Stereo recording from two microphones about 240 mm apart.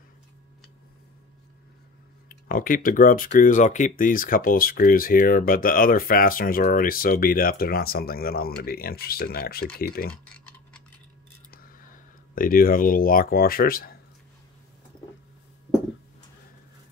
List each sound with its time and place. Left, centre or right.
2.2 s speech: left
11.5 s speech: left